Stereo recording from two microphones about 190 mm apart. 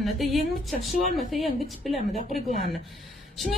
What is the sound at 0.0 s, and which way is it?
A woman's voice, centre (ahead or behind).